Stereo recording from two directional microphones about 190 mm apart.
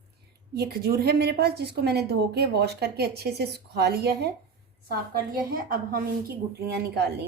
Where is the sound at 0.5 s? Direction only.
55° right (ahead or behind).